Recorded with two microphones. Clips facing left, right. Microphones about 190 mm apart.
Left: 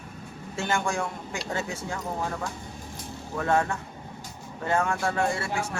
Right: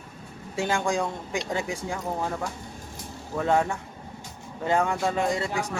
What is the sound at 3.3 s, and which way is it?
A man's voice, 15° right (ahead or behind).